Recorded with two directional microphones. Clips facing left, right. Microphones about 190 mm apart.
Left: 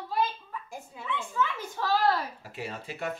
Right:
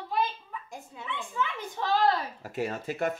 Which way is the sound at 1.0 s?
5° left (ahead or behind).